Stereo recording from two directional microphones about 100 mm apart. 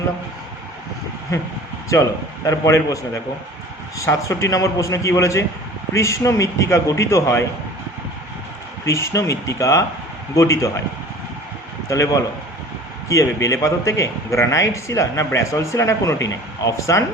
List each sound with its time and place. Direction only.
2.5 s a man's voice: 30° left (ahead or behind)
8.8 s a man's voice: 30° left (ahead or behind)
11.9 s a man's voice: 30° left (ahead or behind)